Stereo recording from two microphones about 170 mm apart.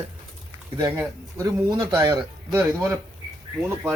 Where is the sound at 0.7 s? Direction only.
15° right (ahead or behind).